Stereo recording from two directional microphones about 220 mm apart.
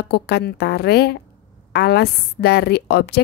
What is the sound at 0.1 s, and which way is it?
A woman's voice, 50° left (ahead or behind).